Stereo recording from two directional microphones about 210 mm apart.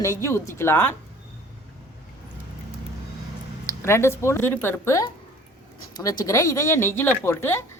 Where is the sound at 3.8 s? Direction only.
10° left (ahead or behind).